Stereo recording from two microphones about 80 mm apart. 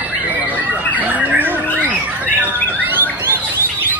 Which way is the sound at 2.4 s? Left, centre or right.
Right.